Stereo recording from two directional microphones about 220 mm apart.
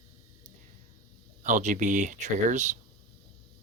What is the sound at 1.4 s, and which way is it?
Speech, 35° right (ahead or behind).